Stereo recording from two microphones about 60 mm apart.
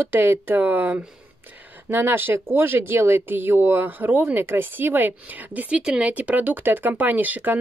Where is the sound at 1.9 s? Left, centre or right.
Right.